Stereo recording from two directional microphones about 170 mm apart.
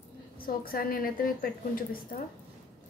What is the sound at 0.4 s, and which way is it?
A woman's voice, 60° left (ahead or behind).